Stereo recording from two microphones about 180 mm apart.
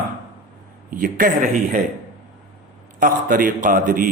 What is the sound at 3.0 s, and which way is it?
A man's voice, 50° right (ahead or behind).